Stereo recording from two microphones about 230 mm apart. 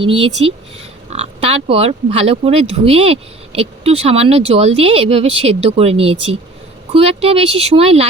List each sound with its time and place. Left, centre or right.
0.0 s speech: right